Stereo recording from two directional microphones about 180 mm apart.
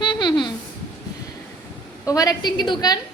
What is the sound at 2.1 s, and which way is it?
Speech, 20° left (ahead or behind).